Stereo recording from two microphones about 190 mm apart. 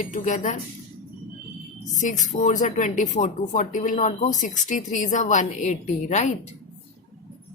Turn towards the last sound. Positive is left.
turn(degrees=35)  # may be behind; listen again after turning